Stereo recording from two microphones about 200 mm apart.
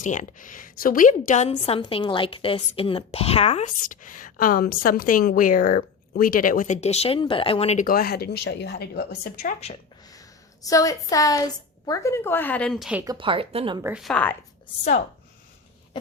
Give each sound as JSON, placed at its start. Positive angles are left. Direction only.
{"t": 0.0, "sound": "a woman's voice", "side_deg": 40}
{"t": 10.1, "sound": "a woman's voice", "side_deg": 15}
{"t": 13.1, "sound": "speech", "side_deg": -25}
{"t": 13.8, "sound": "a woman's voice", "side_deg": -5}